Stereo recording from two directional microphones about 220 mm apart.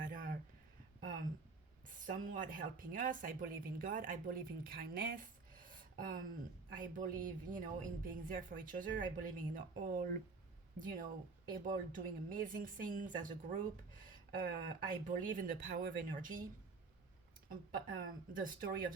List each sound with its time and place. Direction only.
0.0 s a sound: 40° right (ahead or behind)
1.9 s a woman's voice: 35° right (ahead or behind)
17.5 s a woman's voice: 40° right (ahead or behind)